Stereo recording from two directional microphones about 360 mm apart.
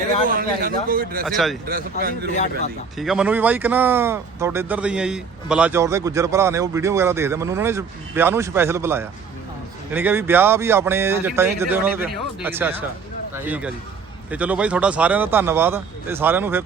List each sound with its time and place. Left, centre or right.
0.3 s a man's voice: right
1.2 s speech: centre
1.6 s a man's voice: right
3.0 s speech: centre